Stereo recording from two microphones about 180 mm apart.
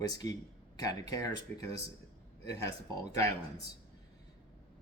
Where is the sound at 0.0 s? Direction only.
20° left (ahead or behind).